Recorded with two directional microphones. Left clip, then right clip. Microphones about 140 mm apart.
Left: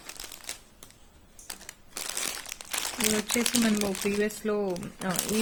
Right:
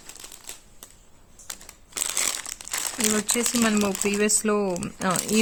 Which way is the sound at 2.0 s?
45° right (ahead or behind).